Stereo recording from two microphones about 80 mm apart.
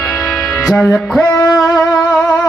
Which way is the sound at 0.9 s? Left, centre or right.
Centre.